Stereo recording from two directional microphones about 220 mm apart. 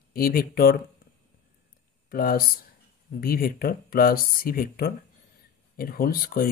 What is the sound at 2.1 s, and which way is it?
Speech, 40° left (ahead or behind).